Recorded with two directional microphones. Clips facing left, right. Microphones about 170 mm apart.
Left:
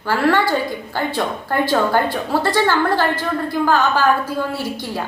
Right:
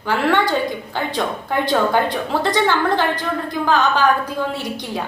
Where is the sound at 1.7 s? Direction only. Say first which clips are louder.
Right 1 dB; 5° left (ahead or behind).